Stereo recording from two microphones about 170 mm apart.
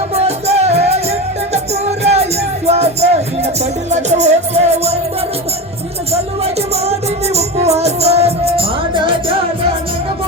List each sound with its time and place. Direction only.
0.1 s music: 35° right (ahead or behind)
7.3 s music: 40° right (ahead or behind)